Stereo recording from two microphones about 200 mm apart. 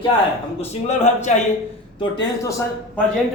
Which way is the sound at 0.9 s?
35° left (ahead or behind).